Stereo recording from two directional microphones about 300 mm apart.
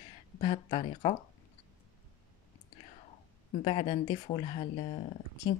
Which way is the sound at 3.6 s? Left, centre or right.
Centre.